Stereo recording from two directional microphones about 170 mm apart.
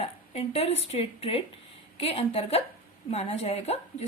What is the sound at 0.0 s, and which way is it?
A woman's voice, 35° left (ahead or behind).